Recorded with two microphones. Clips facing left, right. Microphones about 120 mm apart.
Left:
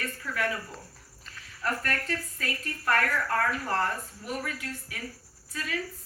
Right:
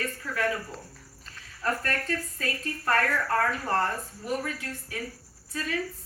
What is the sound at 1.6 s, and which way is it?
A woman's voice, 30° right (ahead or behind).